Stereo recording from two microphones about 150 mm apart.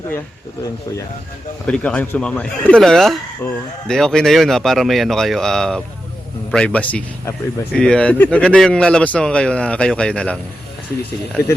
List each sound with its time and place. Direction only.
1.6 s speech: 5° left (ahead or behind)